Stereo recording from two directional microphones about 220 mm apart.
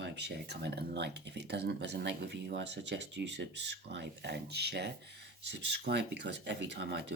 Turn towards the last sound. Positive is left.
turn(degrees=-50)  # may be behind; listen again after turning